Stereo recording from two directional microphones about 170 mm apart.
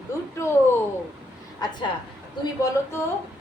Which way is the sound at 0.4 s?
15° left (ahead or behind).